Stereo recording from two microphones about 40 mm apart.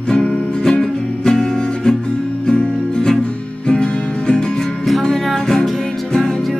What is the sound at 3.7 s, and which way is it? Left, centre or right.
Music, left.